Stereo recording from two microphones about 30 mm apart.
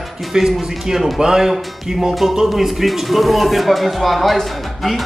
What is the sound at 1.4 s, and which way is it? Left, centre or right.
A man's voice, centre.